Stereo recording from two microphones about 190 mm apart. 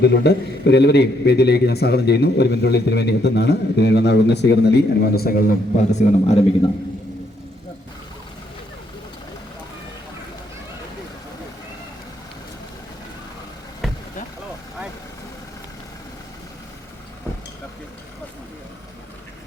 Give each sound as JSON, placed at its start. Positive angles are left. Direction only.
{"t": 0.0, "sound": "a man's voice", "side_deg": 60}
{"t": 13.8, "sound": "vehicle", "side_deg": 0}